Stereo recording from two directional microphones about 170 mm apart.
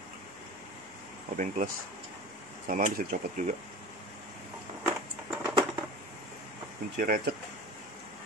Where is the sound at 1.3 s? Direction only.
50° right (ahead or behind).